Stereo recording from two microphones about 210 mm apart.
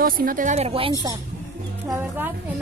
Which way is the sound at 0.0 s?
40° right (ahead or behind).